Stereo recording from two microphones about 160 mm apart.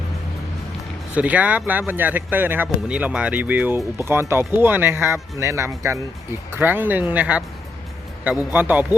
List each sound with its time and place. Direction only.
1.1 s speech: 10° right (ahead or behind)
8.5 s speech: 10° right (ahead or behind)